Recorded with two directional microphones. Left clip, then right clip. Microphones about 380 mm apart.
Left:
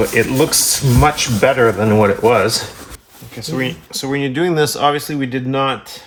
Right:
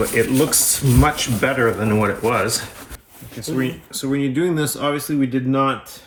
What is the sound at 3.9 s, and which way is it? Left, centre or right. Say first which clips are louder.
Speech: left 2 dB; centre.